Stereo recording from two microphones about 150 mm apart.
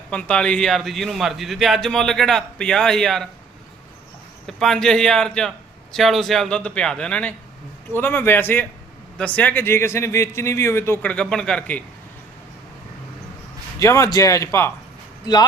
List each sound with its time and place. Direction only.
0.1 s a man's voice: 5° left (ahead or behind)
4.4 s a man's voice: centre (ahead or behind)
13.7 s speech: 20° left (ahead or behind)